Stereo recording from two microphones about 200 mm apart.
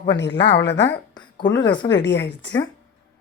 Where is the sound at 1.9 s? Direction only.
60° left (ahead or behind).